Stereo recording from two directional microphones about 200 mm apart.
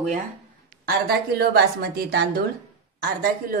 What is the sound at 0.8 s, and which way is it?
Speech, 50° right (ahead or behind).